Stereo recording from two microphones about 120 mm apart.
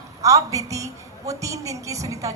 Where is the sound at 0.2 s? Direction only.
30° right (ahead or behind).